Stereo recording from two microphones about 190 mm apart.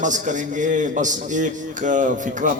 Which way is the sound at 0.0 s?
40° right (ahead or behind).